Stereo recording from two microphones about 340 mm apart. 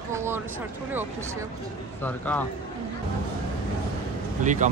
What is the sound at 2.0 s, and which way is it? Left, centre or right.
Speech, centre.